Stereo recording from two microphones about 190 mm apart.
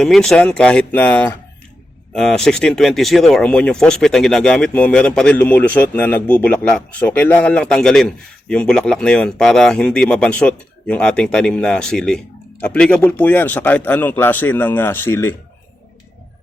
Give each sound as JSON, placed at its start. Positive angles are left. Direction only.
{"t": 0.0, "sound": "speech", "side_deg": 0}